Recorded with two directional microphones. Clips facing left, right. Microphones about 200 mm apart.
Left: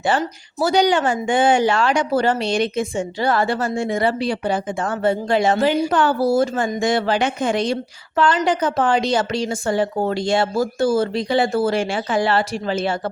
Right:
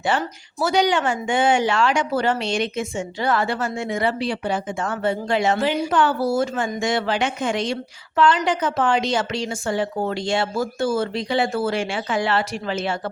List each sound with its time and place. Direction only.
0.6 s speech: 35° left (ahead or behind)